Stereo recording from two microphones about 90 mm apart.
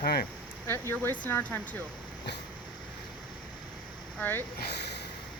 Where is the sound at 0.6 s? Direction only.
30° left (ahead or behind).